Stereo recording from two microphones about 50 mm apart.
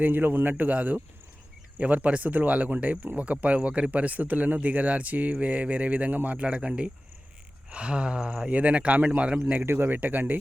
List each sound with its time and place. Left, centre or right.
0.0 s speech: right
9.6 s speech: right